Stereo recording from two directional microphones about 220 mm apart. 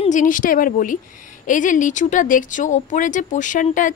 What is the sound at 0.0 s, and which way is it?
Speech, 35° left (ahead or behind).